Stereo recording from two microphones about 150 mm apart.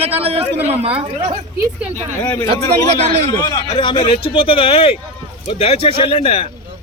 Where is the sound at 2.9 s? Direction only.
30° left (ahead or behind).